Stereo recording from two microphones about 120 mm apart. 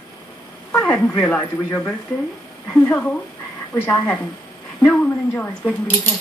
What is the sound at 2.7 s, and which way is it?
Speech, 10° left (ahead or behind).